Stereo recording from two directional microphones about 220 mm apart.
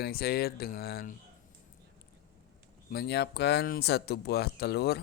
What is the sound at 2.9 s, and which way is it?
Speech, 45° left (ahead or behind).